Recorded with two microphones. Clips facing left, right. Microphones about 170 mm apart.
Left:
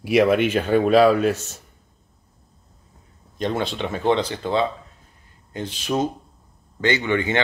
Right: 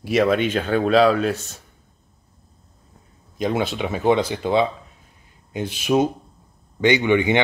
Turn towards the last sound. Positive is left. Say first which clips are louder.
# right 4 dB
turn(degrees=-15)  # may be behind; listen again after turning